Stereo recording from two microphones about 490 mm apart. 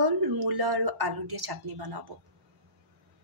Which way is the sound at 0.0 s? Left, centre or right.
Right.